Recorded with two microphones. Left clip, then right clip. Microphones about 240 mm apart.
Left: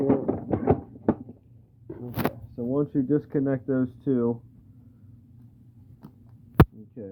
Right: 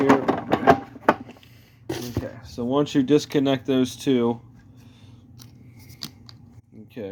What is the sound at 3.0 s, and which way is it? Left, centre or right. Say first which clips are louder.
Speech: right 6 dB; centre.